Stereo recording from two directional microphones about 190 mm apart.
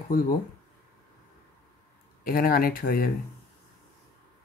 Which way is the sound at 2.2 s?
50° left (ahead or behind).